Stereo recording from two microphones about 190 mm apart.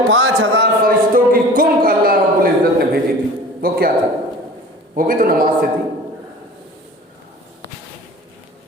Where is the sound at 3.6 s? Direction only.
50° right (ahead or behind).